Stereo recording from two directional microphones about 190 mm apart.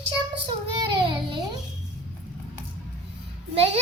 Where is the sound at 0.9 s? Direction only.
25° right (ahead or behind).